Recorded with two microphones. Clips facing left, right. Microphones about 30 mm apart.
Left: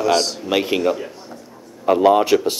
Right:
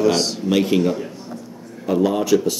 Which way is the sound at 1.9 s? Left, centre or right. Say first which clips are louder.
Left 4 dB; left.